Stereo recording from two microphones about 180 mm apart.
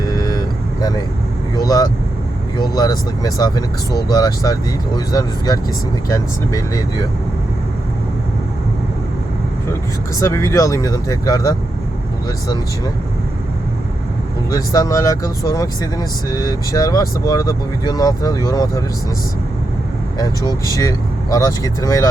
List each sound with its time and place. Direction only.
0.0 s vehicle: 20° left (ahead or behind)
1.5 s speech: 20° left (ahead or behind)
10.2 s speech: 15° left (ahead or behind)
14.5 s speech: 20° left (ahead or behind)
20.1 s speech: 20° left (ahead or behind)